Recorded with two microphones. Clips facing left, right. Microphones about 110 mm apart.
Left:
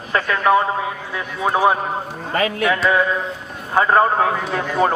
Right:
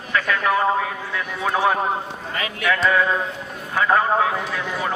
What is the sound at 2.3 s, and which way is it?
Speech, 40° left (ahead or behind).